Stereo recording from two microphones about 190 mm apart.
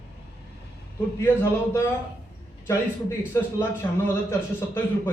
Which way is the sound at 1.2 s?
15° left (ahead or behind).